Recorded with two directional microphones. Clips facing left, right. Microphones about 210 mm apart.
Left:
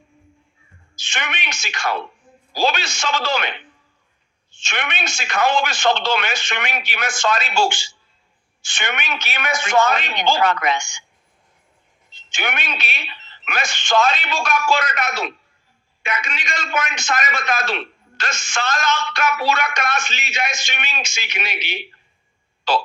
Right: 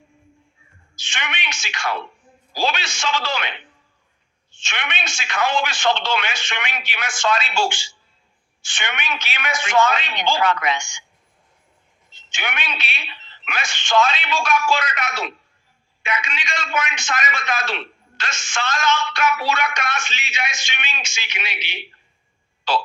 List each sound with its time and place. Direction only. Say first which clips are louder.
0.9 s speech: left 2 dB; 40° left (ahead or behind)
4.6 s speech: left 3 dB; 40° left (ahead or behind)
12.3 s speech: left 2 dB; 40° left (ahead or behind)